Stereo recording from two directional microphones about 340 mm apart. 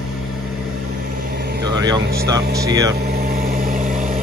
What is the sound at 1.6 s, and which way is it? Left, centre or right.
Speech, centre.